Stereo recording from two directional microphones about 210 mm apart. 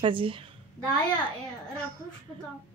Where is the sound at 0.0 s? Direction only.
25° right (ahead or behind).